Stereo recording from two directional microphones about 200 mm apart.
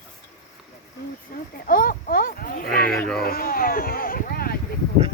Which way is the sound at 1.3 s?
45° left (ahead or behind).